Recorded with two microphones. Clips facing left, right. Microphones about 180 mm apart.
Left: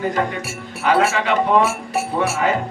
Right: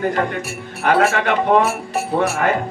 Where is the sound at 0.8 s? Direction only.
55° right (ahead or behind).